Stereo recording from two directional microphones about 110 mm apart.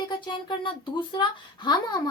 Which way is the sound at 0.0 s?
45° left (ahead or behind).